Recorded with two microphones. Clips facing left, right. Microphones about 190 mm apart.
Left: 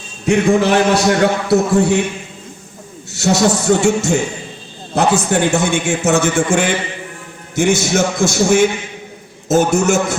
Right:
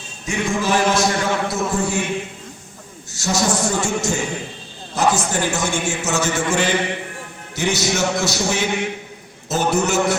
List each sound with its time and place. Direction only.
0.3 s a man's voice: 65° left (ahead or behind)
3.1 s a man's voice: 65° left (ahead or behind); by 10.2 s 45° left (ahead or behind)